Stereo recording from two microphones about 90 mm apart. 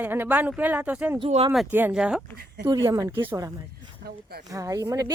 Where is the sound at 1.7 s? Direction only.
20° right (ahead or behind).